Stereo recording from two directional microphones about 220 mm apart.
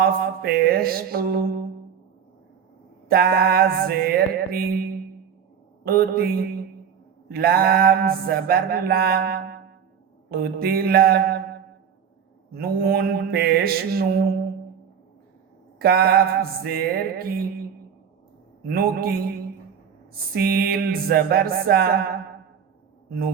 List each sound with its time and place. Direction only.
0.0 s mantra: 45° right (ahead or behind)
3.1 s mantra: 45° right (ahead or behind)
5.8 s mantra: 45° right (ahead or behind)
12.5 s mantra: 45° right (ahead or behind)
15.8 s mantra: 45° right (ahead or behind)
18.7 s mantra: 45° right (ahead or behind)
20.3 s mantra: 45° right (ahead or behind)